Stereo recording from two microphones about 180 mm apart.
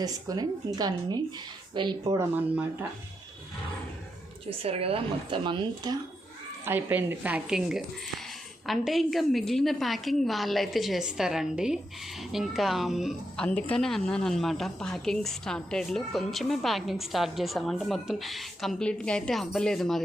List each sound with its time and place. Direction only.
0.0 s a woman's voice: 20° right (ahead or behind)
4.4 s a woman's voice: 30° right (ahead or behind)
6.7 s a woman's voice: 10° right (ahead or behind)